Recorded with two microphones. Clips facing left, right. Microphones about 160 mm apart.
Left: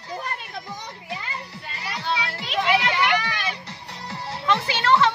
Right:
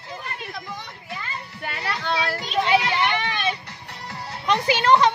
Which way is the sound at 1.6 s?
65° right (ahead or behind).